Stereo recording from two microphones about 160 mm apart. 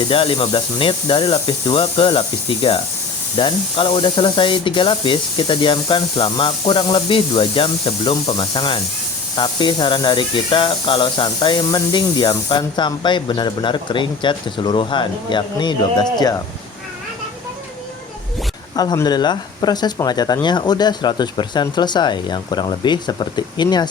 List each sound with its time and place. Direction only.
0.1 s speech: 35° left (ahead or behind)
18.8 s speech: 25° left (ahead or behind)